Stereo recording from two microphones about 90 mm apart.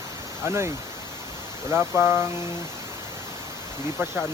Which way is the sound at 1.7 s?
20° right (ahead or behind).